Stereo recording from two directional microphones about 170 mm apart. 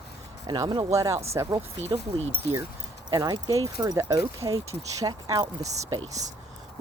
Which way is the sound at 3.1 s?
25° right (ahead or behind).